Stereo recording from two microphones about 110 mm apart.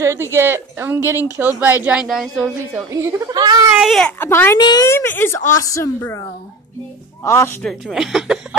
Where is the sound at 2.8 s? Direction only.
25° right (ahead or behind).